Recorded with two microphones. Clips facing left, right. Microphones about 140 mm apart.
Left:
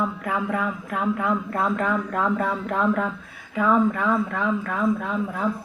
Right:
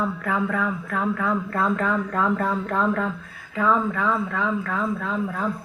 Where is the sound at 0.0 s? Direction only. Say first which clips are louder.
Right 1 dB; 15° left (ahead or behind).